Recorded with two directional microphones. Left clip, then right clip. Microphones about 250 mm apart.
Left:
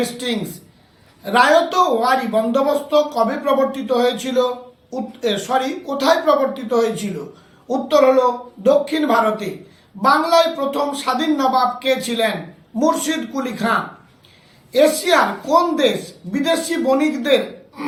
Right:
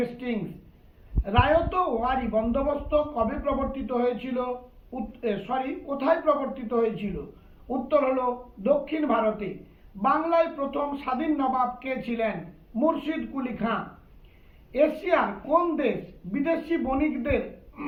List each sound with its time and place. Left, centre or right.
1.2 s a man's voice: centre